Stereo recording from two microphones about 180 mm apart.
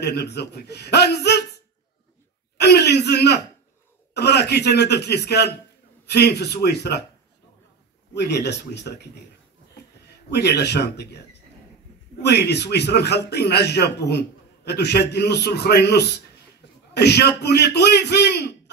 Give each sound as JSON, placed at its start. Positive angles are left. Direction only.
{"t": 0.0, "sound": "a man's voice", "side_deg": 65}
{"t": 2.5, "sound": "a sound", "side_deg": 65}
{"t": 4.1, "sound": "a man's voice", "side_deg": 65}
{"t": 8.1, "sound": "a man's voice", "side_deg": 70}
{"t": 10.3, "sound": "a man's voice", "side_deg": 70}
{"t": 12.2, "sound": "a man's voice", "side_deg": 65}